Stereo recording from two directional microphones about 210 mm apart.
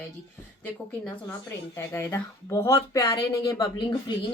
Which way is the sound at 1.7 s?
10° left (ahead or behind).